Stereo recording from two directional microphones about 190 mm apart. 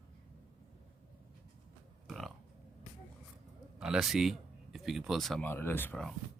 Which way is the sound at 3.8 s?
5° right (ahead or behind).